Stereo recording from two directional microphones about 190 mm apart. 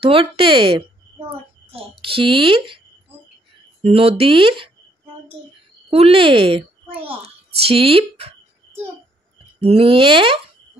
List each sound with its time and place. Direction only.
0.0 s speech: 30° right (ahead or behind)
3.8 s speech: 30° right (ahead or behind)
5.9 s a child's voice: 30° right (ahead or behind)
9.6 s speech: 30° right (ahead or behind)